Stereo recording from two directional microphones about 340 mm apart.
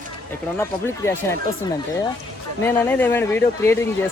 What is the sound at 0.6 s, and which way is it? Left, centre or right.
Speech, centre.